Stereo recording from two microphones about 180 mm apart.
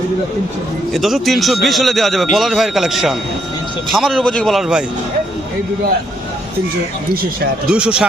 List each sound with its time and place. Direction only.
0.9 s a man's voice: centre (ahead or behind)
7.7 s a man's voice: 5° right (ahead or behind)